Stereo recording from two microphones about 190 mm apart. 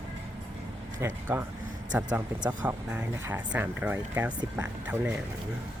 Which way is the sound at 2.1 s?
20° right (ahead or behind).